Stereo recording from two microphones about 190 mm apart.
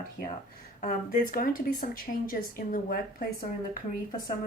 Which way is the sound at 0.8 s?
45° left (ahead or behind).